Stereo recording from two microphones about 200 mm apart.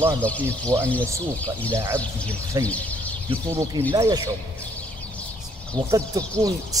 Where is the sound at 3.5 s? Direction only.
15° right (ahead or behind).